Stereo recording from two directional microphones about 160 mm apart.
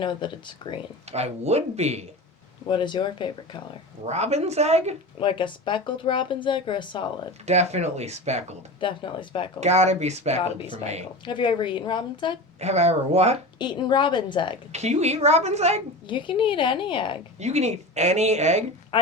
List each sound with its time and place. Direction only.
0.0 s speech: 30° left (ahead or behind)
1.1 s speech: 40° right (ahead or behind)
2.6 s a woman's voice: 30° left (ahead or behind)
4.0 s speech: 45° right (ahead or behind)
5.2 s speech: 30° left (ahead or behind)
7.4 s speech: 45° right (ahead or behind)
8.8 s speech: 30° left (ahead or behind)
9.6 s speech: 45° right (ahead or behind)
10.4 s a woman's voice: 30° left (ahead or behind)
12.5 s speech: 45° right (ahead or behind)
13.6 s a woman's voice: 30° left (ahead or behind)
14.7 s speech: 45° right (ahead or behind)
16.0 s speech: 30° left (ahead or behind)
17.4 s speech: 45° right (ahead or behind)